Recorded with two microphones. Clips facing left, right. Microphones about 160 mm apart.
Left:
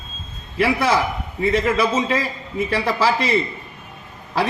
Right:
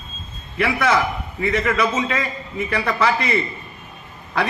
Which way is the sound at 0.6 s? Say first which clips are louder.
Left 1 dB; 30° left (ahead or behind).